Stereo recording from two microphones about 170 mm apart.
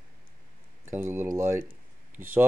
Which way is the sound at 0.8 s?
15° right (ahead or behind).